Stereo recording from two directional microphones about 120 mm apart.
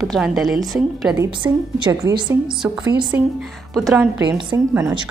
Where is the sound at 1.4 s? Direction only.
40° right (ahead or behind).